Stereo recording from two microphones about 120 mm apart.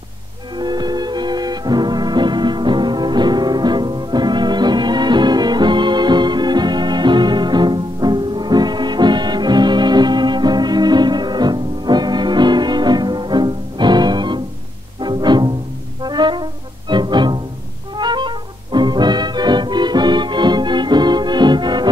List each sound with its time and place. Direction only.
0.6 s music: 35° right (ahead or behind)